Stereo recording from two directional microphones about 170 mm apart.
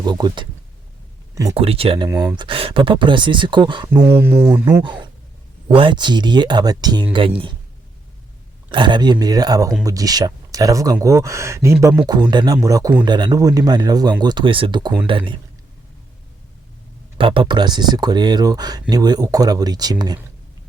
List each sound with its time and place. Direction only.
0.0 s speech: 25° right (ahead or behind)
1.5 s speech: 35° right (ahead or behind)
2.0 s speech: 10° right (ahead or behind)
2.3 s speech: 30° right (ahead or behind)
4.0 s speech: 15° right (ahead or behind)
4.8 s speech: 30° right (ahead or behind)
8.7 s speech: 25° right (ahead or behind)
17.2 s speech: 30° right (ahead or behind)